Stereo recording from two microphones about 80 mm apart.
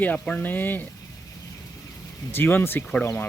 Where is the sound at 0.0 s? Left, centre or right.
Centre.